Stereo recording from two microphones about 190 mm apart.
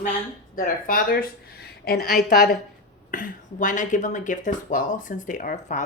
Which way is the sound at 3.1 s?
45° left (ahead or behind).